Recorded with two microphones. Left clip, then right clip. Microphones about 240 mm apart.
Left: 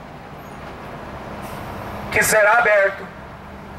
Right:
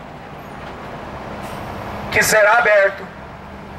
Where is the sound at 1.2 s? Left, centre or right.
Centre.